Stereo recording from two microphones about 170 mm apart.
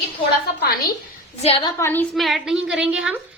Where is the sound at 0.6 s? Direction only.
65° left (ahead or behind).